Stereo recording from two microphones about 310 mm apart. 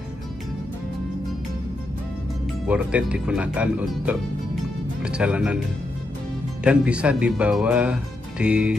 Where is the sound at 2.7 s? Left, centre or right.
Centre.